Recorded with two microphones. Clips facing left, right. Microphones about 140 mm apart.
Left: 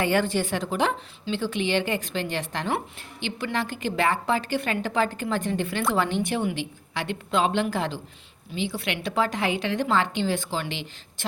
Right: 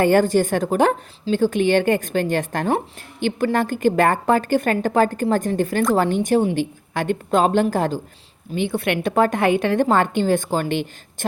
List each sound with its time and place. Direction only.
0.0 s a woman's voice: 45° right (ahead or behind)